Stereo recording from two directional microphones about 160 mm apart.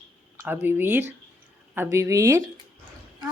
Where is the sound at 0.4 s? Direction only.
15° right (ahead or behind).